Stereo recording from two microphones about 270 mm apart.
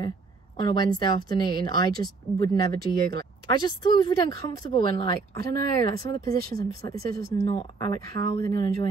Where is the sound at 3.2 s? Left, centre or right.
Centre.